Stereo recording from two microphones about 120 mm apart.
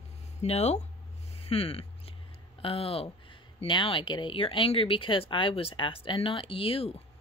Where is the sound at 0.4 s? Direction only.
65° left (ahead or behind).